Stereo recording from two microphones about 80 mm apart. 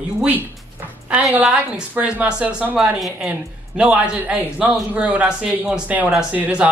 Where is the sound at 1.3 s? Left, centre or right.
Centre.